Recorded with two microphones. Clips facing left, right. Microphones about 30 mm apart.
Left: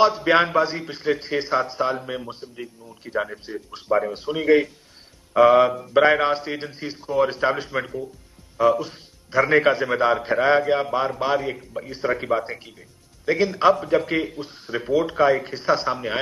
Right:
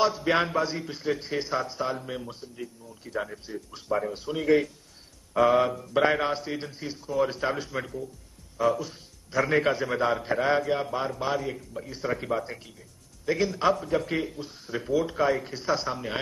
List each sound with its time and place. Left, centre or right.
0.0 s a man's voice: left